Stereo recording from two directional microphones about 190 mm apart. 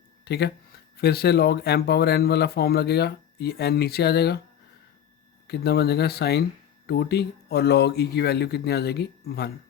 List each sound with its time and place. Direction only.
0.3 s speech: 60° left (ahead or behind)
5.5 s speech: 55° left (ahead or behind)